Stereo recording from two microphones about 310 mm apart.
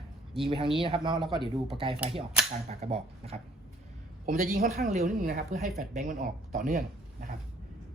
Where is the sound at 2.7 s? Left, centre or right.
Centre.